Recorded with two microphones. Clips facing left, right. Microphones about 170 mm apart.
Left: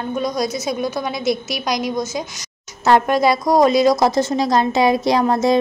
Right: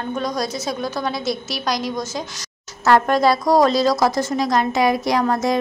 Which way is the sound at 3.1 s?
15° left (ahead or behind).